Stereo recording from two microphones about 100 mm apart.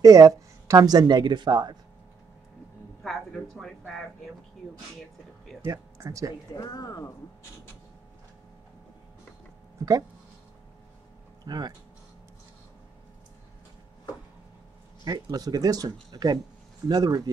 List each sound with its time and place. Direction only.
0.0 s speech: 35° right (ahead or behind)
3.0 s speech: centre (ahead or behind)
5.7 s speech: 35° right (ahead or behind)
6.5 s speech: 40° left (ahead or behind)
11.4 s speech: 45° right (ahead or behind)
15.0 s speech: 40° right (ahead or behind)